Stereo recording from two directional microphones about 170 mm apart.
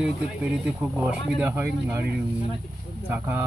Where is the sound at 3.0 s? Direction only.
15° right (ahead or behind).